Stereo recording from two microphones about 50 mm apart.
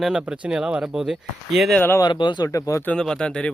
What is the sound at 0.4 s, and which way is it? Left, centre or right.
Speech, right.